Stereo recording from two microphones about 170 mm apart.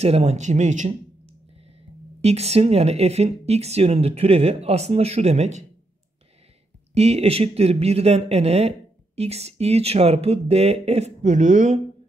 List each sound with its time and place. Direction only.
0.0 s speech: 40° right (ahead or behind)
2.2 s speech: 40° right (ahead or behind)
6.9 s speech: 40° right (ahead or behind)